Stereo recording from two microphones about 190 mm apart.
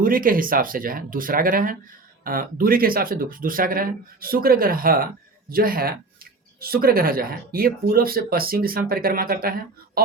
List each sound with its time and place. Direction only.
0.0 s speech: 45° right (ahead or behind)